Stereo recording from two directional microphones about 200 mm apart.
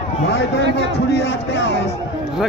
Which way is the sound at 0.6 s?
60° right (ahead or behind).